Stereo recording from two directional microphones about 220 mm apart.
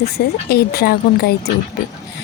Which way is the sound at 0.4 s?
45° left (ahead or behind).